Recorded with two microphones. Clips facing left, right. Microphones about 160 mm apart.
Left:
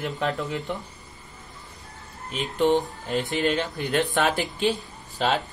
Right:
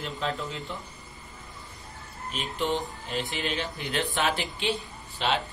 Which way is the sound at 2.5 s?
45° left (ahead or behind).